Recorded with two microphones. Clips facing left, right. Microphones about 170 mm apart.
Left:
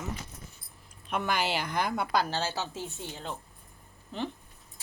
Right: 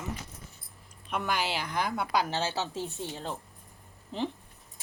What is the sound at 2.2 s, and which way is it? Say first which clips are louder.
A woman's voice: right 1 dB; 25° right (ahead or behind).